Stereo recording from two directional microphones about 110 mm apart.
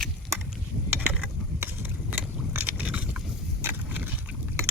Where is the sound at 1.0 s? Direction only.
15° right (ahead or behind).